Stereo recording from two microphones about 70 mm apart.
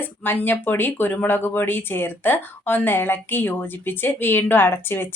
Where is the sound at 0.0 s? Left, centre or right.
Left.